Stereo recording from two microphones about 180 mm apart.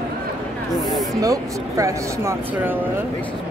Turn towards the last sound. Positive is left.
turn(degrees=-15)  # may be behind; listen again after turning